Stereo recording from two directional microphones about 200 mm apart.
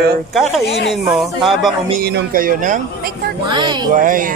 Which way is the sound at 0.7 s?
55° left (ahead or behind).